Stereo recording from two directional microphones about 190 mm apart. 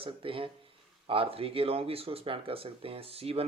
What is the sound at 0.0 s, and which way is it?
Speech, 30° right (ahead or behind).